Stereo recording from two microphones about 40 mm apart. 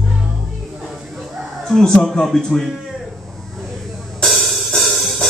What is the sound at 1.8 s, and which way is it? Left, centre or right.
Speech, centre.